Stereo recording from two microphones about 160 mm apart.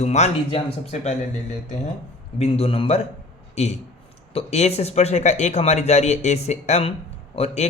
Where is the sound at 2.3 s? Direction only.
40° left (ahead or behind).